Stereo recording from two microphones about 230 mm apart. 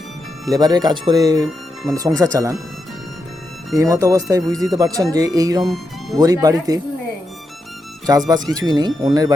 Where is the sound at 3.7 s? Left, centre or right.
Centre.